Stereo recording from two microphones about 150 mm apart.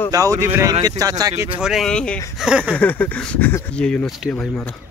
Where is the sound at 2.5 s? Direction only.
5° right (ahead or behind).